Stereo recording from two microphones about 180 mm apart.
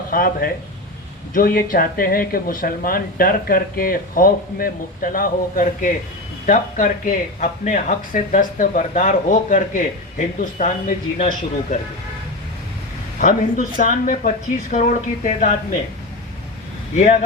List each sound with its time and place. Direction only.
0.1 s speech: 55° left (ahead or behind)
13.1 s speech: 45° left (ahead or behind)